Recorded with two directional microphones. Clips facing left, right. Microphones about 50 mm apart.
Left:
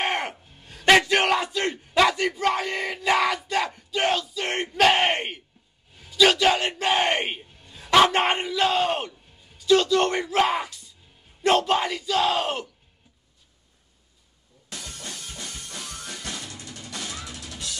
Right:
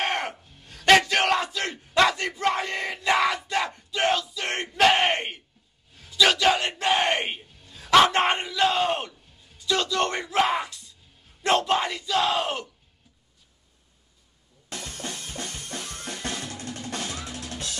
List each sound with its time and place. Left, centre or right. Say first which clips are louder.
0.0 s a sound: left 1 dB; centre
2.5 s crowd: left 1 dB; centre
4.6 s battle cry: even; centre
5.9 s bellow: left 2 dB; centre
11.4 s battle cry: left 2 dB; centre
14.7 s drum kit: right 3 dB; right